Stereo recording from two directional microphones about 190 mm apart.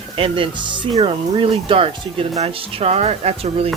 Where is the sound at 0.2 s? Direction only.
25° right (ahead or behind).